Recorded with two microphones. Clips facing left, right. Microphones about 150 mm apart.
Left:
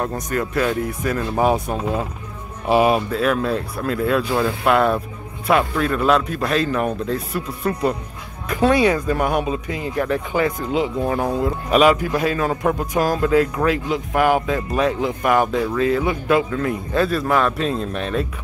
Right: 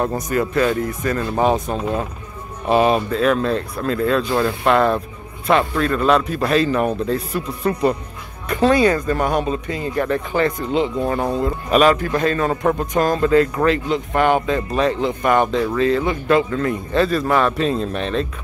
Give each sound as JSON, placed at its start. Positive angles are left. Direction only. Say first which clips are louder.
{"t": 0.0, "sound": "speech", "louder": "right 3 dB", "side_deg": -5}
{"t": 0.6, "sound": "speech", "louder": "right 2 dB", "side_deg": 5}